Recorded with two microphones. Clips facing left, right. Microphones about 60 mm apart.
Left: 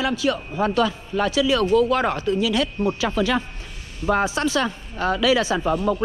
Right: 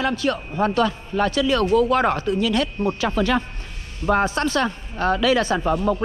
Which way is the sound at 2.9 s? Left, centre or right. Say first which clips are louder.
Right 3 dB; right.